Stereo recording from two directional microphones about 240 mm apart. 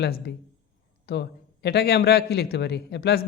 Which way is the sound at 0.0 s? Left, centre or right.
Left.